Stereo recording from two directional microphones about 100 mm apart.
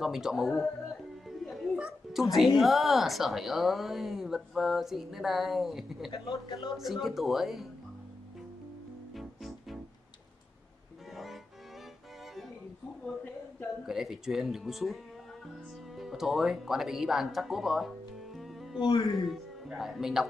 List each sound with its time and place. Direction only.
0.0 s a woman's voice: 5° right (ahead or behind)
2.3 s a woman's voice: centre (ahead or behind)
6.1 s speech: 45° left (ahead or behind)
6.8 s a woman's voice: 5° right (ahead or behind)
9.1 s music: centre (ahead or behind)
13.0 s a sound: 15° left (ahead or behind)
13.8 s a woman's voice: 5° right (ahead or behind)
18.8 s speech: 55° left (ahead or behind)
19.1 s a woman's voice: centre (ahead or behind)